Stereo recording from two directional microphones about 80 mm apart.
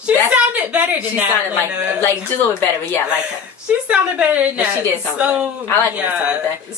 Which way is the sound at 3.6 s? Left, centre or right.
Centre.